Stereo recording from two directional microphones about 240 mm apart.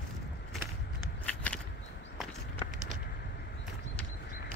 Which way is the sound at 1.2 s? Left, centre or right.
Centre.